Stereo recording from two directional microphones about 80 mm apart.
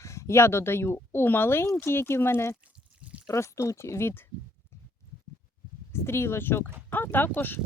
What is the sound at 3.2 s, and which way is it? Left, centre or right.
Speech, left.